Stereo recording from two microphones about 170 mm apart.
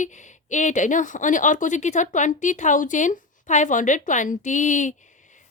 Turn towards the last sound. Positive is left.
turn(degrees=45)  # may be behind; listen again after turning